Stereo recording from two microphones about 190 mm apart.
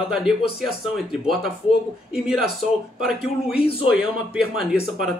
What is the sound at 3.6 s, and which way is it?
Speech, 30° left (ahead or behind).